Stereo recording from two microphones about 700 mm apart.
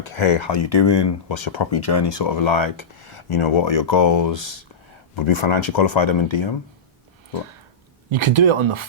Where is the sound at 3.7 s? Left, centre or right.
Left.